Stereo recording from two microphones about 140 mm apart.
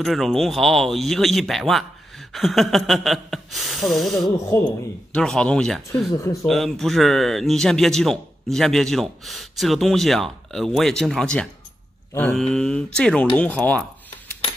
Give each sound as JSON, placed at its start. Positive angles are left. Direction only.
{"t": 0.0, "sound": "speech", "side_deg": 0}
{"t": 4.3, "sound": "speech", "side_deg": 20}
{"t": 5.1, "sound": "speech", "side_deg": 5}